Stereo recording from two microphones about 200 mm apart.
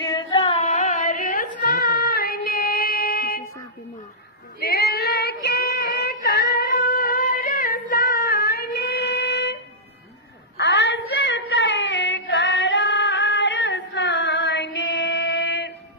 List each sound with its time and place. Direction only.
0.0 s carnatic music: 20° left (ahead or behind)
0.6 s carnatic music: 35° left (ahead or behind)
1.7 s child singing: 50° left (ahead or behind)
4.6 s female singing: 50° left (ahead or behind)
10.6 s child singing: 60° left (ahead or behind)